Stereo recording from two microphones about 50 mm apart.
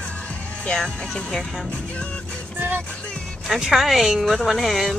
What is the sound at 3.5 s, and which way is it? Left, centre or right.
A woman's voice, centre.